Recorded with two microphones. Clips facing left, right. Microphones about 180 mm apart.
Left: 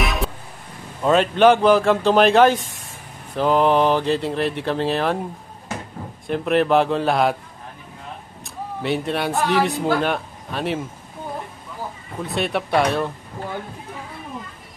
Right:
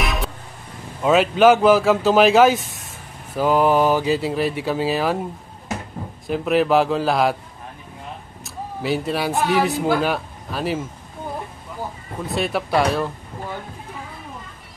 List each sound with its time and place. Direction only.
0.0 s vehicle horn: centre (ahead or behind)
1.0 s speech: 5° right (ahead or behind)
6.2 s speech: centre (ahead or behind)
8.5 s a man's voice: centre (ahead or behind)
12.3 s speech: centre (ahead or behind)